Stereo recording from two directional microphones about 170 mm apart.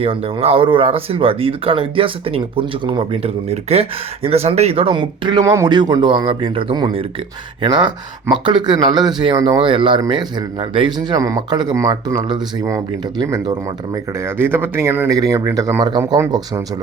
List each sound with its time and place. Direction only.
0.0 s speech: 35° right (ahead or behind)
14.3 s speech: 15° right (ahead or behind)